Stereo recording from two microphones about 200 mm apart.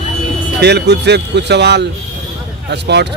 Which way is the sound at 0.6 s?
55° right (ahead or behind).